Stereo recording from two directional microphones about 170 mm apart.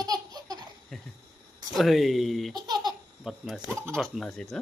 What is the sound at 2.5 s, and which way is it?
Laughter, 25° right (ahead or behind).